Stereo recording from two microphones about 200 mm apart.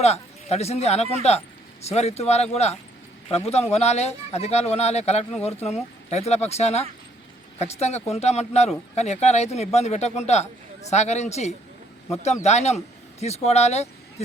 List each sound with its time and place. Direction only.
0.0 s speech: 30° left (ahead or behind)